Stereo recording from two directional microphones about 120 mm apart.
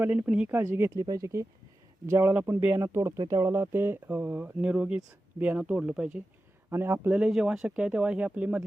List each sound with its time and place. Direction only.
0.0 s speech: 15° right (ahead or behind)
6.7 s speech: 20° right (ahead or behind)
7.1 s speech: 5° right (ahead or behind)